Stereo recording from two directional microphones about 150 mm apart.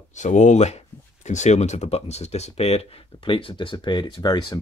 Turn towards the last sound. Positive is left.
turn(degrees=30)  # may be behind; listen again after turning